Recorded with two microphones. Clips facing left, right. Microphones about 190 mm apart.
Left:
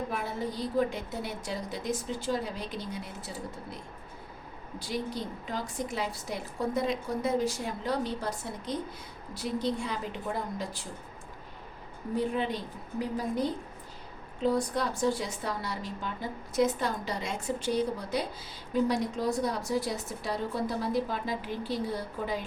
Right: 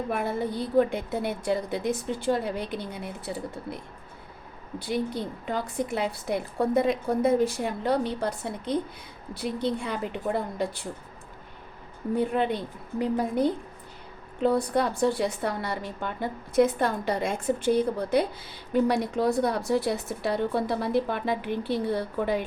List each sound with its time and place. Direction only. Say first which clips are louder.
0.1 s a woman's voice: right 6 dB; 60° right (ahead or behind)
4.8 s a woman's voice: right 5 dB; 60° right (ahead or behind)
12.1 s a woman's voice: right 4 dB; 60° right (ahead or behind)